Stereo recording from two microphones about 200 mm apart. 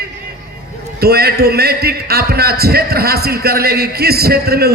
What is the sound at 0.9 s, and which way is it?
A man's voice, 50° right (ahead or behind).